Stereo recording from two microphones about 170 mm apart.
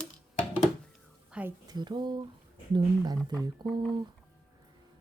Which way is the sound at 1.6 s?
25° right (ahead or behind).